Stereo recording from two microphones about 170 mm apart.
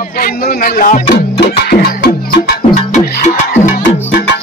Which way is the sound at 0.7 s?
50° left (ahead or behind).